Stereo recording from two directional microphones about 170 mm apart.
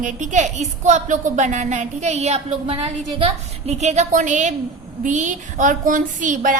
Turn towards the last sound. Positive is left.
turn(degrees=-50)  # may be behind; listen again after turning